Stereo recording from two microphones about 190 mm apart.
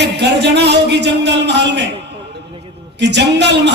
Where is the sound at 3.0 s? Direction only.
65° right (ahead or behind).